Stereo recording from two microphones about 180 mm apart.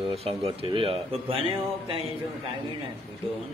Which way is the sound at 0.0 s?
30° right (ahead or behind).